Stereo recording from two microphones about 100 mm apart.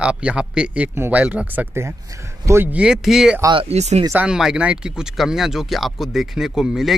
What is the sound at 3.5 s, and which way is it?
Speech, 80° right.